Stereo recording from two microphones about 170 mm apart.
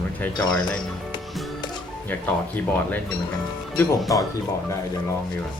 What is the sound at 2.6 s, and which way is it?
Speech, 10° left (ahead or behind).